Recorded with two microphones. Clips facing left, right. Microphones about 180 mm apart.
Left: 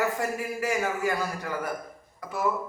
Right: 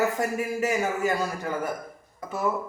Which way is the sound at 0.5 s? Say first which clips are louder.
Right 2 dB; 25° right (ahead or behind).